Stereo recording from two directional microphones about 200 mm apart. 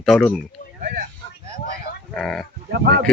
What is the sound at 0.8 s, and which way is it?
Speech, 45° right (ahead or behind).